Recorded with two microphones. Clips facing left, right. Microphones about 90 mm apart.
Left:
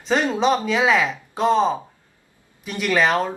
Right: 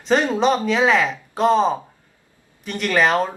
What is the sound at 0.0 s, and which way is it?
Speech, centre (ahead or behind).